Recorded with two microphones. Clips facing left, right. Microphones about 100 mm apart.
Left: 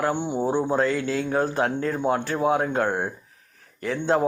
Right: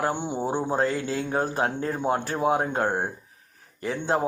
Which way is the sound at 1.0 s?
25° right (ahead or behind).